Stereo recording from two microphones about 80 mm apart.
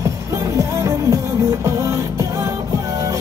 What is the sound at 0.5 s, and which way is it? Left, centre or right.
Music, right.